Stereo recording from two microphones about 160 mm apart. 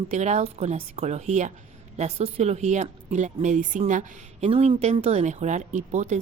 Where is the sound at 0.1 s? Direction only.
45° right (ahead or behind).